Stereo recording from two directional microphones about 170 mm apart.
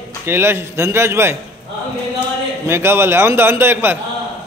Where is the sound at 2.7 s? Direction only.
15° right (ahead or behind).